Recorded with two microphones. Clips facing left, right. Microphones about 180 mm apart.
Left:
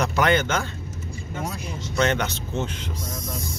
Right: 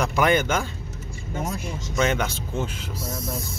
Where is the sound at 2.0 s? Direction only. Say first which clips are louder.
Even; 10° right (ahead or behind).